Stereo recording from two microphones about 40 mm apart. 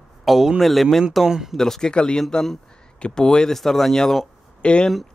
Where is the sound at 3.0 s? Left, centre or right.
Left.